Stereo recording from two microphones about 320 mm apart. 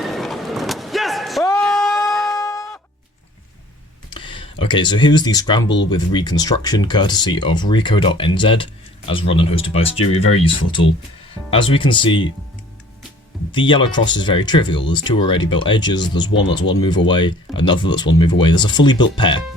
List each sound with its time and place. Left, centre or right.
0.0 s a sound: centre
4.1 s speech: centre
11.5 s speech: centre
13.5 s speech: centre